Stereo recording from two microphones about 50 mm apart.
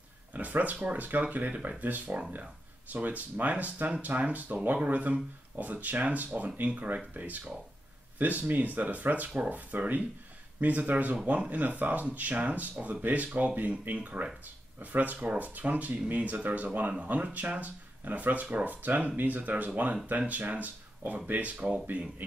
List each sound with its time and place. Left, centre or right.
0.3 s speech: right
8.2 s speech: right